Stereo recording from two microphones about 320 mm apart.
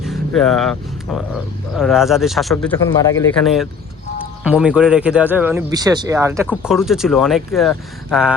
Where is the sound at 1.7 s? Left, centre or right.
Centre.